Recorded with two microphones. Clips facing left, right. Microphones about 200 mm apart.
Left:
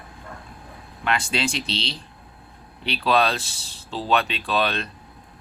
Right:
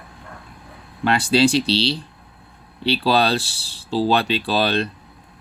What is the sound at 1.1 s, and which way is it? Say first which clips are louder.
Speech: right 8 dB; 35° right (ahead or behind).